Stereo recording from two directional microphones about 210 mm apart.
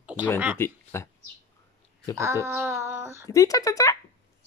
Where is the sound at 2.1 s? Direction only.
15° right (ahead or behind).